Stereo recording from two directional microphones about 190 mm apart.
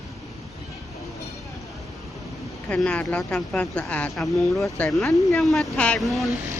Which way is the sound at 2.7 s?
5° left (ahead or behind).